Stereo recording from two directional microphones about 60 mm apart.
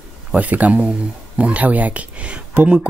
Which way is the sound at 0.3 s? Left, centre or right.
Right.